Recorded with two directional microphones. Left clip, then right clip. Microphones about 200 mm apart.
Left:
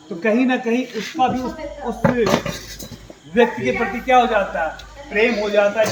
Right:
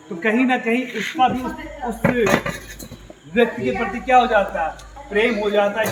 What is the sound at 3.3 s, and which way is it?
Speech, 15° right (ahead or behind).